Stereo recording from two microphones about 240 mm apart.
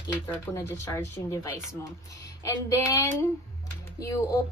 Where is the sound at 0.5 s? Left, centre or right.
Centre.